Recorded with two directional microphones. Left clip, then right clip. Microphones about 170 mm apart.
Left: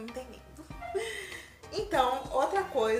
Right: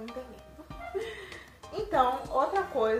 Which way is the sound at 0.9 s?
5° left (ahead or behind).